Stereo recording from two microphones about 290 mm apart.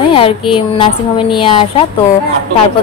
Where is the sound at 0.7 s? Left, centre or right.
Centre.